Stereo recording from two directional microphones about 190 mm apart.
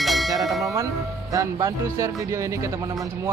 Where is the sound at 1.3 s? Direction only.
15° right (ahead or behind).